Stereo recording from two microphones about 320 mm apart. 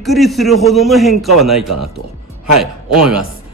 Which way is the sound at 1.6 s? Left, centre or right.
Right.